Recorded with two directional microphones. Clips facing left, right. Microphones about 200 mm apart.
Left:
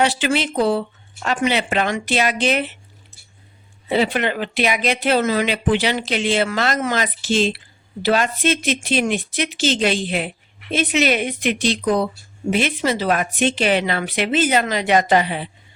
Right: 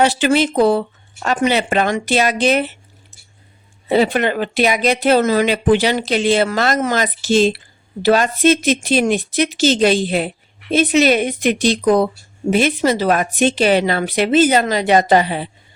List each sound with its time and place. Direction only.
0.0 s speech: 45° right (ahead or behind)
3.8 s speech: 45° right (ahead or behind)